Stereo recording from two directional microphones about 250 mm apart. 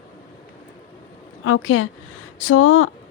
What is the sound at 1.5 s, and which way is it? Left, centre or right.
A woman's voice, left.